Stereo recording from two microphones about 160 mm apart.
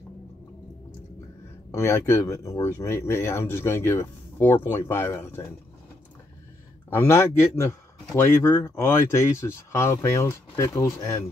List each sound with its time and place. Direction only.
1.7 s a man's voice: 15° left (ahead or behind)
7.0 s a man's voice: 15° left (ahead or behind)